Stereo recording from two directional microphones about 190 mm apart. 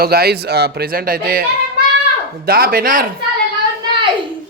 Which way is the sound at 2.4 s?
50° right (ahead or behind).